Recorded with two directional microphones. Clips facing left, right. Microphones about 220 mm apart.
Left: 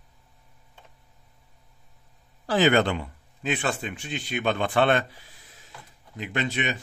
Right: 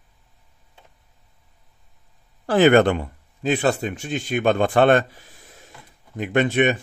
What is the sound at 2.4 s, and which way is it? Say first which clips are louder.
Speech: right 6 dB; 55° right (ahead or behind).